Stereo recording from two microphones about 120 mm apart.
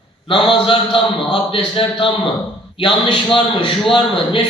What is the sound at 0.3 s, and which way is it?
A man's voice, 45° left (ahead or behind).